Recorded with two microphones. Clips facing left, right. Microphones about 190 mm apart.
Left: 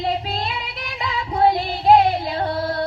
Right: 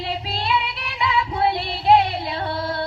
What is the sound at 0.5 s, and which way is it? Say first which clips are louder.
Music: right 6 dB; 40° left (ahead or behind).